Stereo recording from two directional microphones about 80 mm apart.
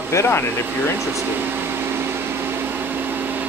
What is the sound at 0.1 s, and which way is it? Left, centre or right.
Speech, left.